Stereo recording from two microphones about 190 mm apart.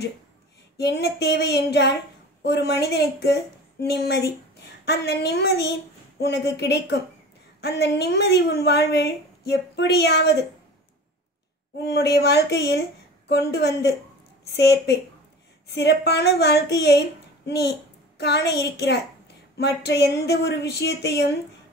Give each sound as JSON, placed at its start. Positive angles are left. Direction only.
{"t": 0.7, "sound": "a woman's voice", "side_deg": 60}
{"t": 11.8, "sound": "a woman's voice", "side_deg": 60}